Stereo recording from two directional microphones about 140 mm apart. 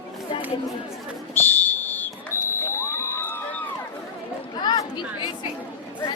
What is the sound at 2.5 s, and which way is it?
Crowd, 20° left (ahead or behind).